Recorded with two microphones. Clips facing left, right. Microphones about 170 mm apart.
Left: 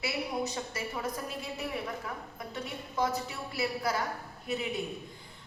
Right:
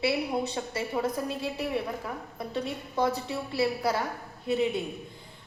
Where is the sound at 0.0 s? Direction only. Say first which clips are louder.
Right 6 dB; 30° right (ahead or behind).